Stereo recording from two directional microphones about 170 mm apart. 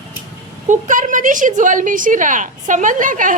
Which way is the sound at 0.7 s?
50° right (ahead or behind).